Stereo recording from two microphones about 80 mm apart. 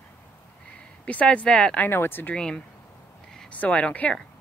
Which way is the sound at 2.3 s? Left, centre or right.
Centre.